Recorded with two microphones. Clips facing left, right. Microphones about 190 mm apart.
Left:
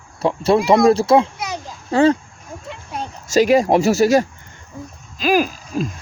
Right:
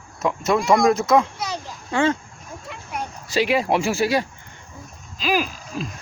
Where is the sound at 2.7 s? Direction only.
25° left (ahead or behind).